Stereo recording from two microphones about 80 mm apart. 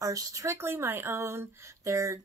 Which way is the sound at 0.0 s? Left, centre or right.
Right.